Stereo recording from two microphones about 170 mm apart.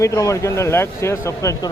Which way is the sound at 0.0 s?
20° left (ahead or behind).